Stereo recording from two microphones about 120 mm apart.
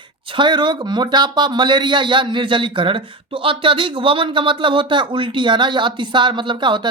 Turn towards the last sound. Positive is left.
turn(degrees=-40)  # may be behind; listen again after turning